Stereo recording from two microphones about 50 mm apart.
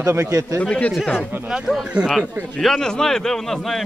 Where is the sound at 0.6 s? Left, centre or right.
Left.